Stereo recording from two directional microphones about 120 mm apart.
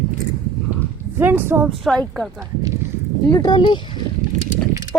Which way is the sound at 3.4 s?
40° left (ahead or behind).